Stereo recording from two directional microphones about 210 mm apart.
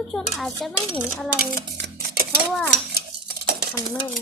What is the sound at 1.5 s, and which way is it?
Stir, 50° right (ahead or behind).